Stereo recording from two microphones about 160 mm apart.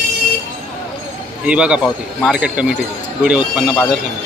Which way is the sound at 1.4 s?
5° right (ahead or behind).